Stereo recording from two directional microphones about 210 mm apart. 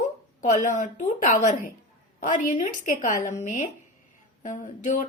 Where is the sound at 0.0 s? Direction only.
35° left (ahead or behind).